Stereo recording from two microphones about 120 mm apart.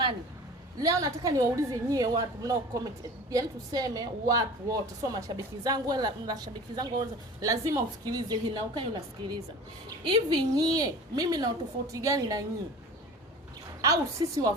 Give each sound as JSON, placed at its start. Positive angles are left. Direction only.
{"t": 0.8, "sound": "a woman's voice", "side_deg": -30}
{"t": 13.8, "sound": "a woman's voice", "side_deg": -30}